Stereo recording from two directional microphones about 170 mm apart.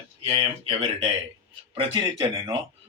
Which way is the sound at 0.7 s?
35° right (ahead or behind).